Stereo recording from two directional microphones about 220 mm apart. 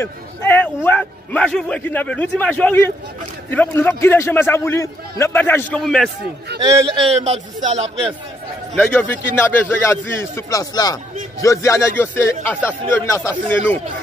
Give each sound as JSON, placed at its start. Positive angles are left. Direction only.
{"t": 0.0, "sound": "a man's voice", "side_deg": 10}
{"t": 6.6, "sound": "a man's voice", "side_deg": -15}
{"t": 7.2, "sound": "a man's voice", "side_deg": -30}
{"t": 8.7, "sound": "a man's voice", "side_deg": 5}